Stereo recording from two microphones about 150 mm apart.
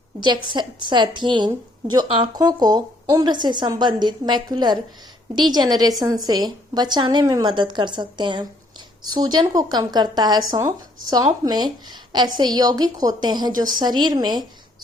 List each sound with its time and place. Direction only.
0.2 s a woman's voice: 30° right (ahead or behind)